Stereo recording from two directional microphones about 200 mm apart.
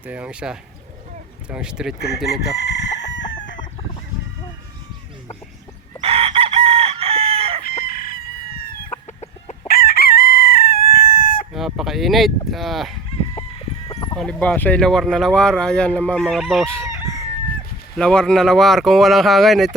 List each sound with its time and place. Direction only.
0.0 s speech: 5° right (ahead or behind)
2.0 s chicken: 55° left (ahead or behind)
6.0 s chicken: 30° right (ahead or behind)
7.9 s chicken: 45° left (ahead or behind)
9.6 s chicken: 50° left (ahead or behind)
11.5 s honk: centre (ahead or behind)
13.6 s chicken: 25° left (ahead or behind)
14.2 s speech: 5° left (ahead or behind)
16.8 s chicken: 15° right (ahead or behind)
17.9 s speech: 5° left (ahead or behind)